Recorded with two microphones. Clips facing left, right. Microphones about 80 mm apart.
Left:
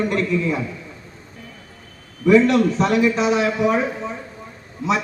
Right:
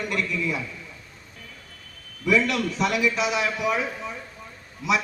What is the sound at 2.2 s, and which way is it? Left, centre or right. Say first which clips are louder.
A man's voice: left 9 dB; left.